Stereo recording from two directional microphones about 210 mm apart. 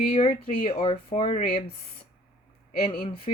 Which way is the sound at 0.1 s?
25° left (ahead or behind).